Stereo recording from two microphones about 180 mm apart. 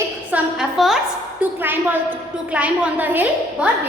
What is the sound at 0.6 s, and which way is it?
A woman's voice, centre (ahead or behind).